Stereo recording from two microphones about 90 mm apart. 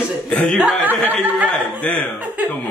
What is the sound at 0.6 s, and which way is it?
Speech, 20° right (ahead or behind).